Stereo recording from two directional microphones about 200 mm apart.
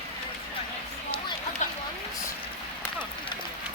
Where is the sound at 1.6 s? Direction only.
35° left (ahead or behind).